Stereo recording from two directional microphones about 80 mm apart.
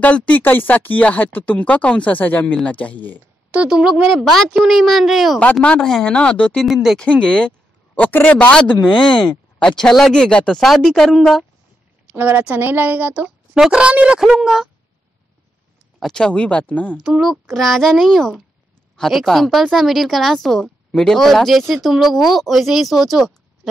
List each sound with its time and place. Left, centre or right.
0.0 s speech: centre
3.5 s speech: centre
4.1 s a woman's voice: centre
5.4 s speech: centre
6.6 s a woman's voice: centre
7.0 s a woman's voice: centre
12.1 s speech: right
16.0 s speech: centre
16.9 s a woman's voice: centre